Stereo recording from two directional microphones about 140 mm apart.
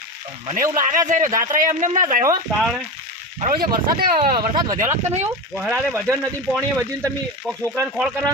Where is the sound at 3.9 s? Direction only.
90° right.